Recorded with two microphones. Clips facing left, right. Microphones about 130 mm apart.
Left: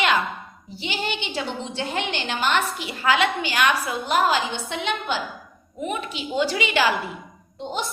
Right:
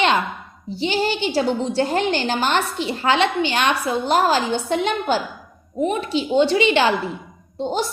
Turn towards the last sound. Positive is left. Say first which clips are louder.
# right 6 dB
turn(degrees=-35)  # may be behind; listen again after turning